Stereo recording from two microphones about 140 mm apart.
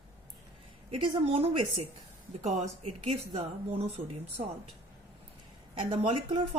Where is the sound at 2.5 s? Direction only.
55° right (ahead or behind).